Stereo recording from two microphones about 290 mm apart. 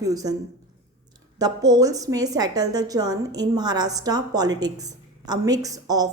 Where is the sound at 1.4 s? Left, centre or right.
Centre.